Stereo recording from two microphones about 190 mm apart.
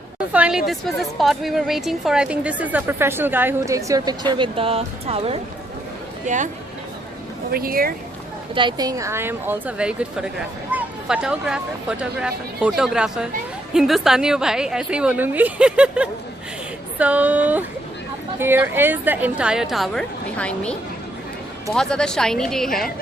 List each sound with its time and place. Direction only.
0.3 s a woman's voice: 5° right (ahead or behind); by 5.4 s 30° right (ahead or behind)
6.2 s speech: 40° right (ahead or behind)
7.5 s speech: 50° right (ahead or behind)
8.5 s a woman's voice: 25° right (ahead or behind); by 22.9 s centre (ahead or behind)